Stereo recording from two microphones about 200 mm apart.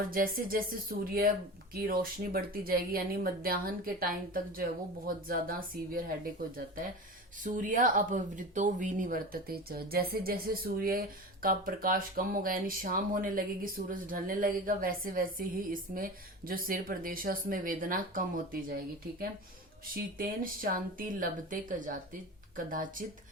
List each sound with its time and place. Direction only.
0.1 s a woman's voice: 45° right (ahead or behind)
19.8 s a woman's voice: 45° right (ahead or behind)